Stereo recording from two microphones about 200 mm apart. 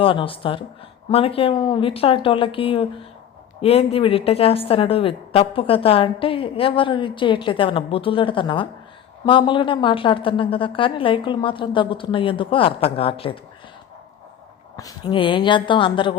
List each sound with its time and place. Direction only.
0.0 s a woman's voice: 25° left (ahead or behind)
14.8 s a woman's voice: 20° left (ahead or behind)